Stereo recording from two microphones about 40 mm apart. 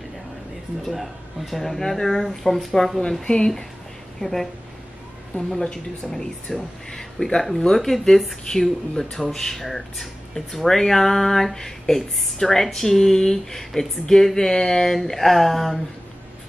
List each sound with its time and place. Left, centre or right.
0.8 s speech: centre
6.0 s speech: centre